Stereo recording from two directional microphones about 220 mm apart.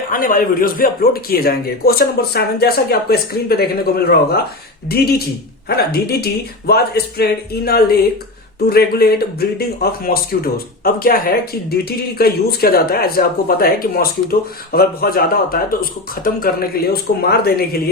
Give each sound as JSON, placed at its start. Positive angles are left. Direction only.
{"t": 0.1, "sound": "speech", "side_deg": 40}